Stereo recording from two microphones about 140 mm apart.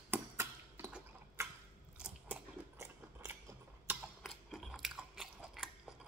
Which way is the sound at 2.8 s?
20° right (ahead or behind).